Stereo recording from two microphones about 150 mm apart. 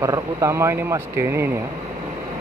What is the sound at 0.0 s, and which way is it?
Speech, 20° right (ahead or behind).